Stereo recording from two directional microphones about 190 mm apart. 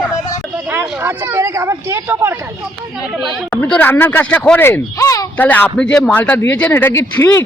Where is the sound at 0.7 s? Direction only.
10° right (ahead or behind).